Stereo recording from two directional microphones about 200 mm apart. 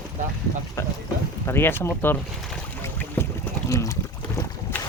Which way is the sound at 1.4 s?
10° left (ahead or behind).